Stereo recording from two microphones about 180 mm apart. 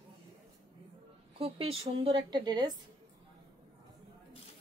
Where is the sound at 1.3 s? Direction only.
30° right (ahead or behind).